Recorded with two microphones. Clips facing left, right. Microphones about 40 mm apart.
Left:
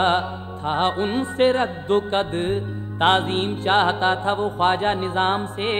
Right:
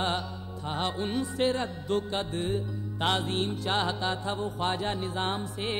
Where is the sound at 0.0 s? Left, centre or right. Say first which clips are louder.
Left 11 dB; left.